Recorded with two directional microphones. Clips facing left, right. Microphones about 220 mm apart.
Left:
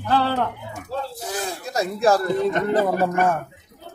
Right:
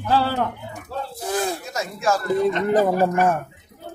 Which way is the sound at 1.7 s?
35° left (ahead or behind).